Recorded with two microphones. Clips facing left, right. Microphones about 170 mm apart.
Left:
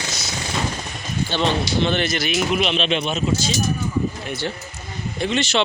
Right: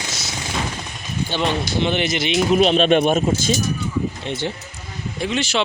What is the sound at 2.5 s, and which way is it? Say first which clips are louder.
Speech: right 10 dB; 40° right (ahead or behind).